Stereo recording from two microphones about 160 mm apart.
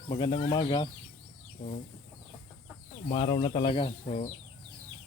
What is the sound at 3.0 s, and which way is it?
Speech, 30° left (ahead or behind).